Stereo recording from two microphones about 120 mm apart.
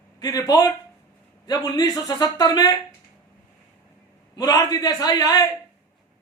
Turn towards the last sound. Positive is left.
turn(degrees=35)  # may be behind; listen again after turning